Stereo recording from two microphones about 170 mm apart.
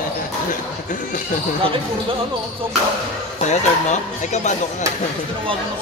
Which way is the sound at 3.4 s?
45° left (ahead or behind).